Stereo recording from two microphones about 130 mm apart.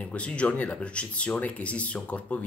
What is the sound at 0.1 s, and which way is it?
Speech, 10° left (ahead or behind).